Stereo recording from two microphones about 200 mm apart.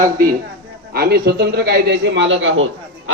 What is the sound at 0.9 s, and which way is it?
A man's voice, 50° right (ahead or behind).